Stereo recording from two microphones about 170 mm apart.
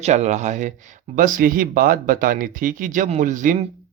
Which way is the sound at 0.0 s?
40° right (ahead or behind).